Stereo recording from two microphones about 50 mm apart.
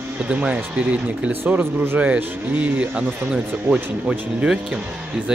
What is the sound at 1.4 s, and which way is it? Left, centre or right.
Speech, right.